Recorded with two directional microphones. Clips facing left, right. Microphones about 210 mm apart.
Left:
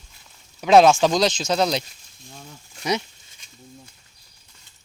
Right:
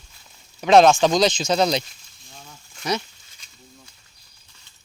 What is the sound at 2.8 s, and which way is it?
Speech, 20° left (ahead or behind).